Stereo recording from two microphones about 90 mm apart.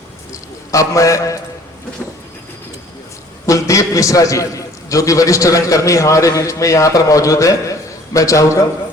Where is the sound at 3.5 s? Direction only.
35° left (ahead or behind).